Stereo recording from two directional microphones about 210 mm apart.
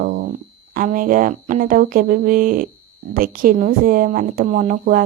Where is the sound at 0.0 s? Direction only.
40° right (ahead or behind).